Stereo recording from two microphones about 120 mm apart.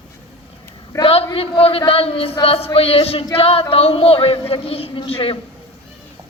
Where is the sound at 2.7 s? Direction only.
55° left (ahead or behind).